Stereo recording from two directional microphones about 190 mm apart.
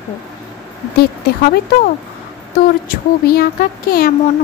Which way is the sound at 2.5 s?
50° left (ahead or behind).